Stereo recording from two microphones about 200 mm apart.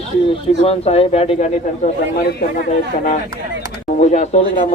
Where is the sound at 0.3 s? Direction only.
30° left (ahead or behind).